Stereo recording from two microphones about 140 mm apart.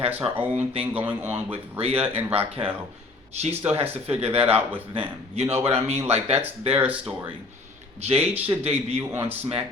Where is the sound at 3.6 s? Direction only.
45° right (ahead or behind).